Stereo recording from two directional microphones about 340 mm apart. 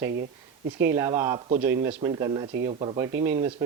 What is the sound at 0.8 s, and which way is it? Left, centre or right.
A man's voice, centre.